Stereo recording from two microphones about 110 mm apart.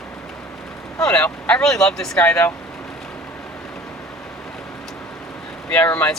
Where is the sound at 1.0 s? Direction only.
10° left (ahead or behind).